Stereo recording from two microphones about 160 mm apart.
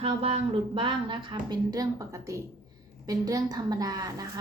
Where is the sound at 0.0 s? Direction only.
40° right (ahead or behind).